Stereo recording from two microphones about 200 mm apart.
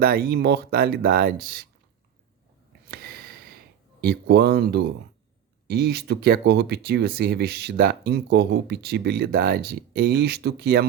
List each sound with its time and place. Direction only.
0.0 s speech: 50° right (ahead or behind)
2.9 s a sound: 50° right (ahead or behind)
4.0 s speech: 55° right (ahead or behind)